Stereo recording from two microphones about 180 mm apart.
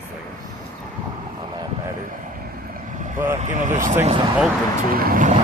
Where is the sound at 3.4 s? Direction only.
45° right (ahead or behind).